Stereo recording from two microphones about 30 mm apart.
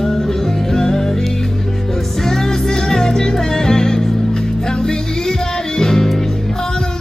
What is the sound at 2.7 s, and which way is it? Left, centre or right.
Music, centre.